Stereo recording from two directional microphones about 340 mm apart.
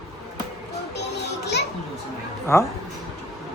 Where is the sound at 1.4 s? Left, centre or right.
Left.